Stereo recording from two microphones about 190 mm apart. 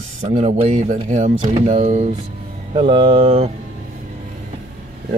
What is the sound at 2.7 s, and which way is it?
Speech, 30° right (ahead or behind).